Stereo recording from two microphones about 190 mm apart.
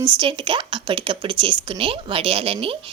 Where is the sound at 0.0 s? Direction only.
25° right (ahead or behind).